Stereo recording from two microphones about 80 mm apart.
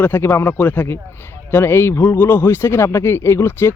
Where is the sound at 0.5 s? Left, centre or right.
Left.